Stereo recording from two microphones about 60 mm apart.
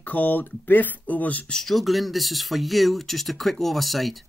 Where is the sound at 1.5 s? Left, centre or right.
Centre.